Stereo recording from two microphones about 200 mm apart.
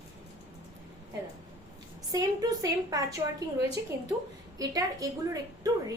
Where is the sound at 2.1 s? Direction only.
20° right (ahead or behind).